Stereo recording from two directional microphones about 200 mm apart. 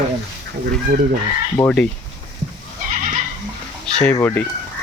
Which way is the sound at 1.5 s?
5° left (ahead or behind).